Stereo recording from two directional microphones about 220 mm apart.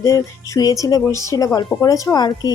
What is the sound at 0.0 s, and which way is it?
A woman's voice, 15° left (ahead or behind).